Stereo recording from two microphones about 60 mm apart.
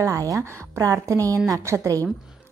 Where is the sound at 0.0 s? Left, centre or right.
Right.